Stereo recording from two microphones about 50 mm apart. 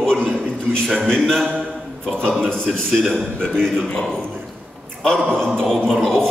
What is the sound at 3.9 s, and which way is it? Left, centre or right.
Speech, centre.